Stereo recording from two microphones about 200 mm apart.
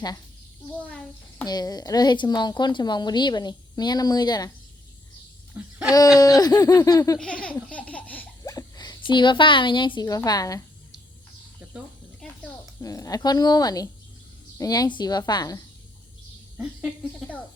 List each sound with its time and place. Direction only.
0.9 s a child's voice: 5° left (ahead or behind)
1.5 s a woman's voice: 20° left (ahead or behind)
5.6 s speech: 5° right (ahead or behind)
5.9 s a woman's voice: 20° left (ahead or behind)
7.2 s laughter: 5° left (ahead or behind)
11.6 s snake: 5° right (ahead or behind)
12.8 s a woman's voice: 15° left (ahead or behind)
16.6 s speech: centre (ahead or behind)